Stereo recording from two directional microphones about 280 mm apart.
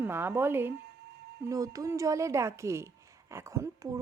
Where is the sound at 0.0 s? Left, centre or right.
Centre.